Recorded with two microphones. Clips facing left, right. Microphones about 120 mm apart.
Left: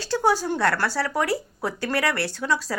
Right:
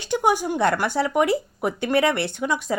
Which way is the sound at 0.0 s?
15° right (ahead or behind).